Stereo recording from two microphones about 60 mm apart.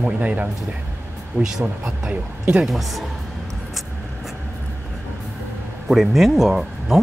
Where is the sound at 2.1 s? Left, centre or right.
Right.